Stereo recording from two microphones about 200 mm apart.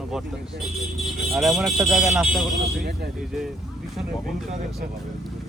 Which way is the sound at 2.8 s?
55° right (ahead or behind).